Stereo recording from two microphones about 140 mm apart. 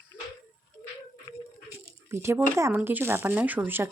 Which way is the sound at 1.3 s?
30° left (ahead or behind).